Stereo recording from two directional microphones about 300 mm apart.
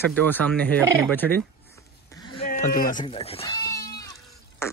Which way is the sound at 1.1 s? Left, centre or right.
Centre.